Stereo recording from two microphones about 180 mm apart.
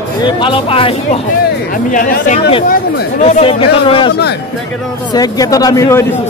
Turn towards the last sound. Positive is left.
turn(degrees=15)  # may be behind; listen again after turning